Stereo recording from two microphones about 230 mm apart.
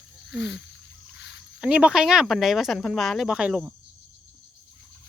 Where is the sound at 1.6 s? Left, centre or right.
Centre.